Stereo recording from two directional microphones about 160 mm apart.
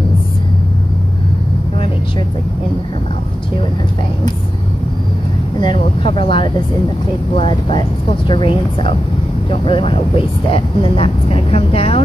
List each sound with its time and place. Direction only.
5.6 s speech: 30° left (ahead or behind)